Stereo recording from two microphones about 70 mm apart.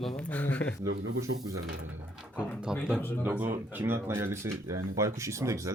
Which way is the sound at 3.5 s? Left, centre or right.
Right.